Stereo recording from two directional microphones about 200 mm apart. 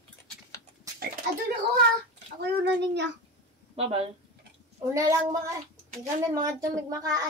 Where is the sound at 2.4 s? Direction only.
60° right (ahead or behind).